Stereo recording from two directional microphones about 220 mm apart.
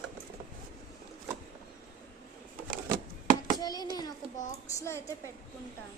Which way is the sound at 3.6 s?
20° left (ahead or behind).